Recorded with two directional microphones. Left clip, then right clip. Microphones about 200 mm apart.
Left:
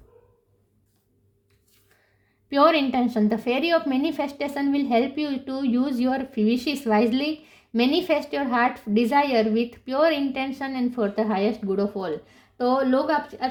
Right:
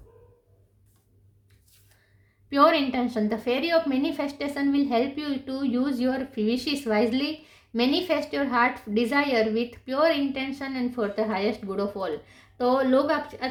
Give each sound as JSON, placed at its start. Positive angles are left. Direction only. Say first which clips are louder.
{"t": 2.5, "sound": "a woman's voice", "louder": "left 1 dB", "side_deg": 35}